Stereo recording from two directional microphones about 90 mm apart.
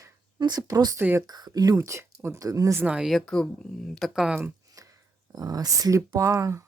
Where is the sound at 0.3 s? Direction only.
50° right (ahead or behind).